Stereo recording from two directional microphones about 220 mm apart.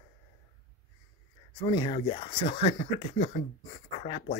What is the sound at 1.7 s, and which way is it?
Speech, 20° left (ahead or behind).